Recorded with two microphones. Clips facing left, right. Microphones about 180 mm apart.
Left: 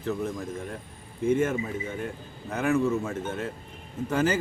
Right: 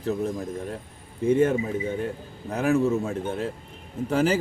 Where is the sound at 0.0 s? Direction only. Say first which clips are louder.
Right 3 dB; 35° right (ahead or behind).